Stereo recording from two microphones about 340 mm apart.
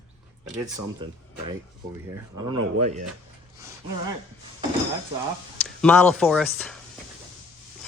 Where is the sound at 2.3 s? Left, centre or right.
Centre.